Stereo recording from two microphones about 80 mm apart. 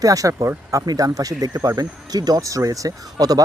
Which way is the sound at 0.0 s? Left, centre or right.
Right.